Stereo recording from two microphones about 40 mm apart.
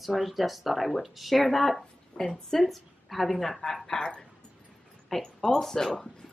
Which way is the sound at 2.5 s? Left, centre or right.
Centre.